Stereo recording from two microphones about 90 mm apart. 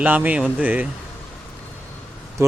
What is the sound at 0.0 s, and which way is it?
Speech, 20° right (ahead or behind).